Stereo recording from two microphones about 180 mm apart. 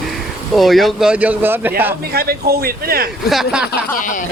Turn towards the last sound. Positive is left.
turn(degrees=45)  # may be behind; listen again after turning